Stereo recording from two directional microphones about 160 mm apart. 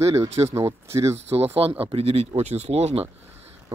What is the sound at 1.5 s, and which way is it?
Speech, 35° right (ahead or behind).